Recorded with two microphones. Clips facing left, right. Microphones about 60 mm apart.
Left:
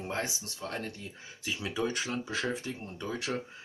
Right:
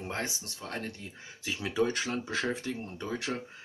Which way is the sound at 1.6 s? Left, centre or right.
Right.